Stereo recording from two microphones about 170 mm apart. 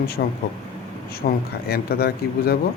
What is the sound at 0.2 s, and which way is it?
Speech, 65° left (ahead or behind).